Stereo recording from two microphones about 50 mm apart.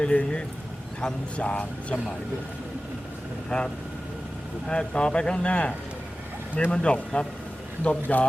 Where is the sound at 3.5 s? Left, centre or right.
Centre.